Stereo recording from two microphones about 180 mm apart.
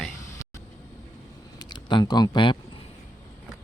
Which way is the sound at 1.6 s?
25° left (ahead or behind).